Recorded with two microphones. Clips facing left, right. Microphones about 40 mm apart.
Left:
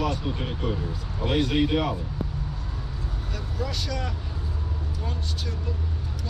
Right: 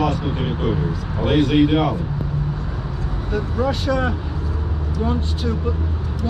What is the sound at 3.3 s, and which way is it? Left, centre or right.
Speech, right.